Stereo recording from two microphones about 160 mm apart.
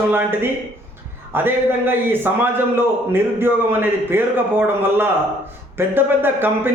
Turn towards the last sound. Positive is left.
turn(degrees=-15)  # may be behind; listen again after turning